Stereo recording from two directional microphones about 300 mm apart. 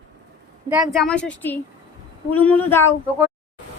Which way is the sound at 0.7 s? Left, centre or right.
Centre.